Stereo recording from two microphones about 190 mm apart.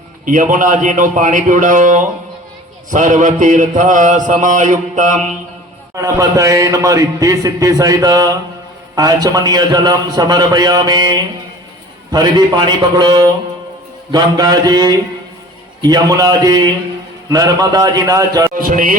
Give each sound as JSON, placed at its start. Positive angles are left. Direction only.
{"t": 0.3, "sound": "a man's voice", "side_deg": -45}
{"t": 2.9, "sound": "mantra", "side_deg": -40}
{"t": 6.0, "sound": "a man's voice", "side_deg": -15}
{"t": 18.5, "sound": "a man's voice", "side_deg": -45}